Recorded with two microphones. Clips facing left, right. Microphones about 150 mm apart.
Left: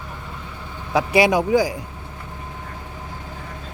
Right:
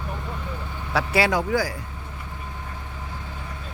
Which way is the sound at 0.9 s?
15° left (ahead or behind).